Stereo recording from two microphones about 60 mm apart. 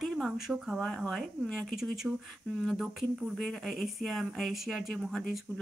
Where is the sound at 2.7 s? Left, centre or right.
Centre.